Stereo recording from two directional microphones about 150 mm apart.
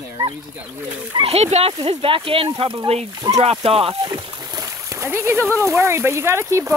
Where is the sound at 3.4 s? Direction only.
40° right (ahead or behind).